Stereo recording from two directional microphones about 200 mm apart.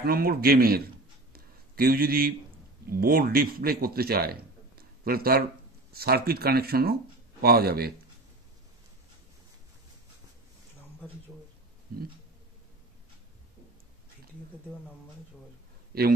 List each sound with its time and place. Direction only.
0.0 s speech: 50° right (ahead or behind)
1.3 s a sound: 50° right (ahead or behind)
2.9 s a man's voice: 45° right (ahead or behind)
11.9 s speech: 50° right (ahead or behind)
15.9 s speech: 50° right (ahead or behind)